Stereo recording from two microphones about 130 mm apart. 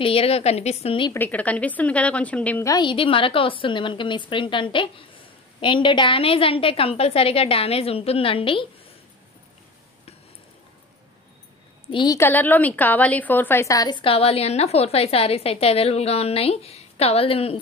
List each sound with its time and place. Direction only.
0.0 s a woman's voice: 45° left (ahead or behind)
1.1 s a woman's voice: 15° left (ahead or behind)
2.6 s a woman's voice: 35° left (ahead or behind)
11.9 s a woman's voice: 35° left (ahead or behind)
12.2 s a woman's voice: 15° left (ahead or behind); by 17.6 s 45° left (ahead or behind)